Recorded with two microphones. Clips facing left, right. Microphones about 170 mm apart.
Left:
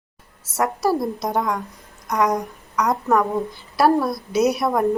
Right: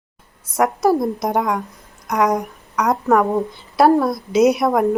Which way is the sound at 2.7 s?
20° right (ahead or behind).